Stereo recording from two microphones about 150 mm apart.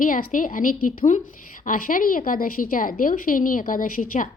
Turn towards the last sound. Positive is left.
turn(degrees=65)  # may be behind; listen again after turning